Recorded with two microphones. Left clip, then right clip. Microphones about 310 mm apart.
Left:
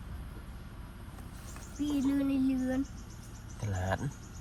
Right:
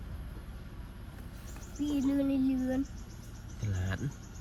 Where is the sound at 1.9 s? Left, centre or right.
Centre.